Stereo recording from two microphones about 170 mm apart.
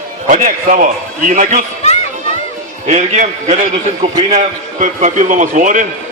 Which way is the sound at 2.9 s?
40° right (ahead or behind).